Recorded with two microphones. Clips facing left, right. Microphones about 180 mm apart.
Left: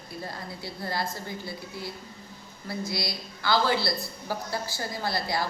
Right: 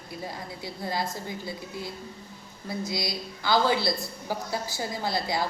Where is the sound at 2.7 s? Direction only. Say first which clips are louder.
Right 1 dB; 20° right (ahead or behind).